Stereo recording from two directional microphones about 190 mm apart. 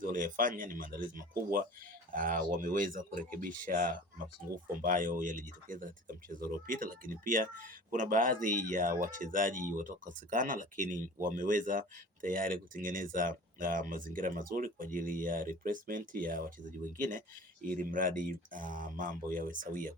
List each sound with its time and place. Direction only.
0.0 s speech: 45° right (ahead or behind)